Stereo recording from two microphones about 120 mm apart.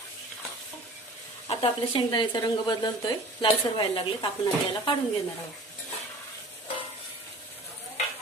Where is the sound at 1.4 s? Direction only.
45° left (ahead or behind).